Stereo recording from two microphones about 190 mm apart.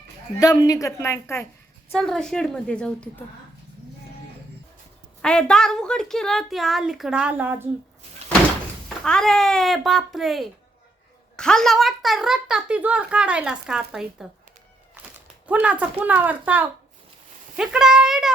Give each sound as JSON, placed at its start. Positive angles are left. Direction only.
{"t": 0.3, "sound": "a woman's voice", "side_deg": 20}
{"t": 2.0, "sound": "a child's voice", "side_deg": 5}
{"t": 5.2, "sound": "a child's voice", "side_deg": 5}
{"t": 8.2, "sound": "door", "side_deg": -35}
{"t": 9.0, "sound": "a child's voice", "side_deg": 5}
{"t": 15.0, "sound": "cat", "side_deg": -10}
{"t": 15.4, "sound": "a child's voice", "side_deg": -5}